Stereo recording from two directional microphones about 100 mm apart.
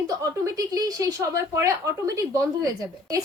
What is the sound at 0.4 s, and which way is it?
A woman's voice, 35° right (ahead or behind).